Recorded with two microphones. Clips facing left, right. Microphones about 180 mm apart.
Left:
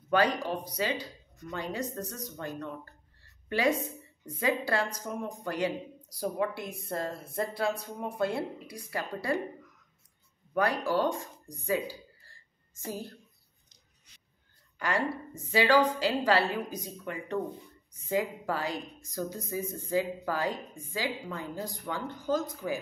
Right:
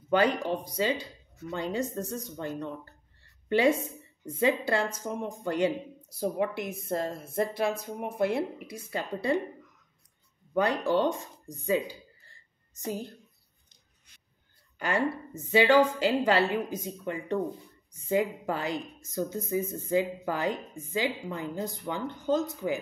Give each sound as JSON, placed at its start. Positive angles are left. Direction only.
{"t": 0.1, "sound": "a woman's voice", "side_deg": -25}
{"t": 10.5, "sound": "speech", "side_deg": -25}
{"t": 13.7, "sound": "a sound", "side_deg": -55}
{"t": 14.8, "sound": "a woman's voice", "side_deg": -25}